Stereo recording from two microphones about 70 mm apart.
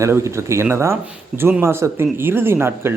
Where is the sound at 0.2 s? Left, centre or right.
Right.